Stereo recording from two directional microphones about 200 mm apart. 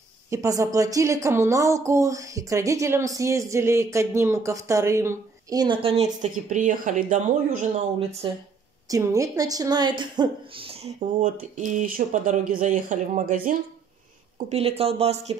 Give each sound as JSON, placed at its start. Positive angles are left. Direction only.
{"t": 0.3, "sound": "a woman's voice", "side_deg": -15}
{"t": 8.8, "sound": "a woman's voice", "side_deg": -15}